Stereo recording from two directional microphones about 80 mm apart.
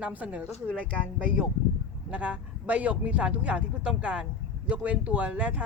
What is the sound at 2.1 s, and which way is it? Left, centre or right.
Speech, centre.